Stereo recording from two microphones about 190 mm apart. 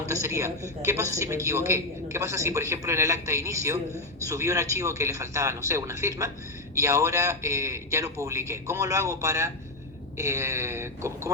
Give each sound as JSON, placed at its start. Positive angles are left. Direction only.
{"t": 0.1, "sound": "speech", "side_deg": -15}